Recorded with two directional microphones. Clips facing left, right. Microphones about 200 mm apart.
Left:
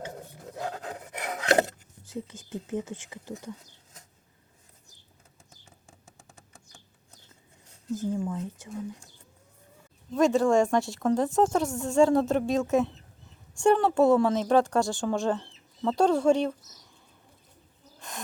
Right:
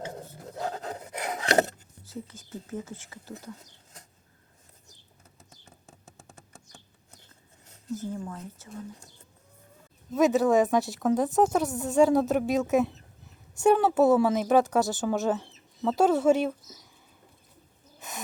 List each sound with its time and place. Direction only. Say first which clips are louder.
0.6 s filing: right 2 dB; 40° right (ahead or behind)
2.2 s speech: left 4 dB; 15° left (ahead or behind)
8.1 s speech: left 6 dB; 15° left (ahead or behind)
10.1 s speech: even; 5° right (ahead or behind)